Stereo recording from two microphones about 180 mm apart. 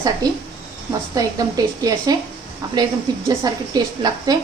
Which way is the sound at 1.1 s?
20° right (ahead or behind).